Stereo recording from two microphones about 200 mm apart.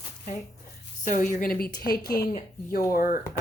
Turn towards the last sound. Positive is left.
turn(degrees=45)  # may be behind; listen again after turning